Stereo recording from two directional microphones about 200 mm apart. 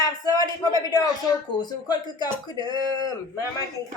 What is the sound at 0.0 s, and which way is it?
Speech, 20° left (ahead or behind).